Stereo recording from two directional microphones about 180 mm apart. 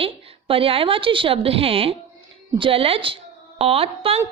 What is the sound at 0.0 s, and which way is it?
A woman's voice, 30° right (ahead or behind).